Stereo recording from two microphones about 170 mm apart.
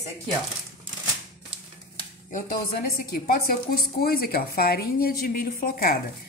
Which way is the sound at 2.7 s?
65° left (ahead or behind).